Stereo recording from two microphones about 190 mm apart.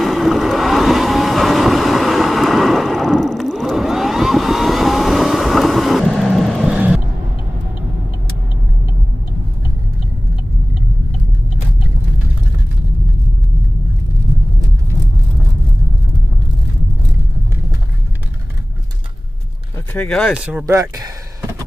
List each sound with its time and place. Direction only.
0.0 s vehicle: centre (ahead or behind)
19.9 s speech: 5° left (ahead or behind)
20.6 s speech: 20° right (ahead or behind)